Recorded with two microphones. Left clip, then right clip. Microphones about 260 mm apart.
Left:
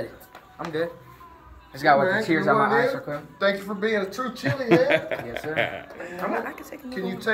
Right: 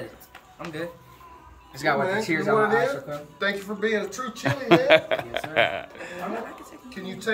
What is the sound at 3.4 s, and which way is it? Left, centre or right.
A man's voice, centre.